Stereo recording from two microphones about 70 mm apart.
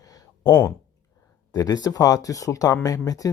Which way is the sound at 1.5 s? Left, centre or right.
Left.